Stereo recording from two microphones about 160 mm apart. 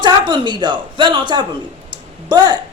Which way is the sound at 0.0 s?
30° right (ahead or behind).